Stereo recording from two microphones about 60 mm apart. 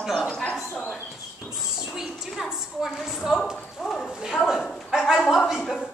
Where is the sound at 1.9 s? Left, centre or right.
Centre.